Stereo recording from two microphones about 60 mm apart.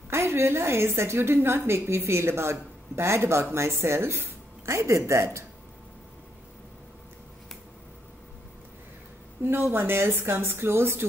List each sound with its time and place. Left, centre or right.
0.1 s a woman's voice: right
9.4 s speech: right